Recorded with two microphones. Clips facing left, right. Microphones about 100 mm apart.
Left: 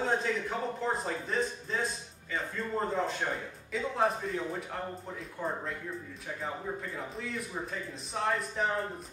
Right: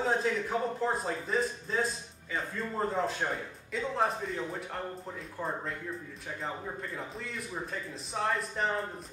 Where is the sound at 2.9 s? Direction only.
Centre (ahead or behind).